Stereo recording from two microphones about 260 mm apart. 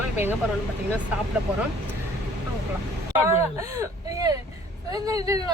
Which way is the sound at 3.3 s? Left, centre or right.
Centre.